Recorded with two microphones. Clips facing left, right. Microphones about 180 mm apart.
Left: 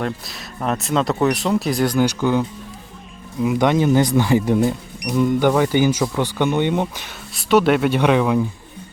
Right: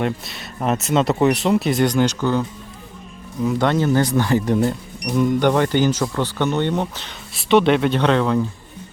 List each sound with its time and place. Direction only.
0.0 s speech: centre (ahead or behind)
7.3 s speech: centre (ahead or behind)